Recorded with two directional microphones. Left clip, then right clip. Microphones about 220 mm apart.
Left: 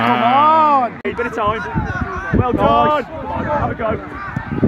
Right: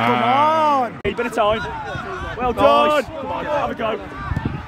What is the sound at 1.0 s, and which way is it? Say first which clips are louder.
Speech: even; 45° right (ahead or behind).